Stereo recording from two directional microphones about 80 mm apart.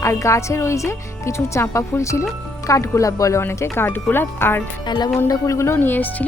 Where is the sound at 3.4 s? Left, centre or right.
Left.